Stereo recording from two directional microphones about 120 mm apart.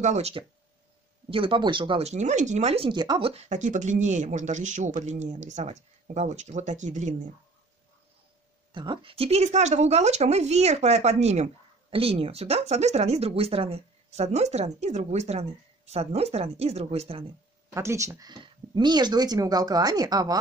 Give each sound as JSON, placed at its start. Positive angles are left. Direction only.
{"t": 0.0, "sound": "speech", "side_deg": -65}
{"t": 2.0, "sound": "speech", "side_deg": -80}
{"t": 2.9, "sound": "speech", "side_deg": -35}
{"t": 3.2, "sound": "speech", "side_deg": -50}
{"t": 3.4, "sound": "speech", "side_deg": -90}
{"t": 8.7, "sound": "speech", "side_deg": -45}
{"t": 17.6, "sound": "speech", "side_deg": -25}